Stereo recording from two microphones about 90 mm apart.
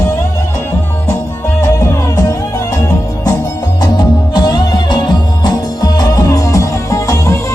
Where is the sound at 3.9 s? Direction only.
50° left (ahead or behind).